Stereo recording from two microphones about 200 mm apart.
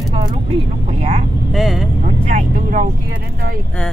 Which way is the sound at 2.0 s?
40° right (ahead or behind).